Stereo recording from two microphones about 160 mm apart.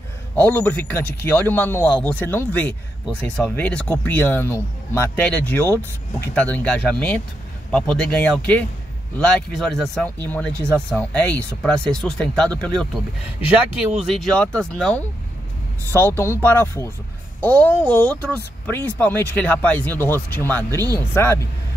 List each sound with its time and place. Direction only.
0.4 s speech: 10° left (ahead or behind)
15.9 s speech: 15° left (ahead or behind)